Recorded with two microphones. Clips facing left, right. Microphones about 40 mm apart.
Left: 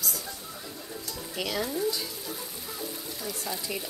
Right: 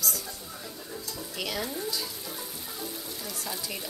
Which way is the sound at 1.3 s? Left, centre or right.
Centre.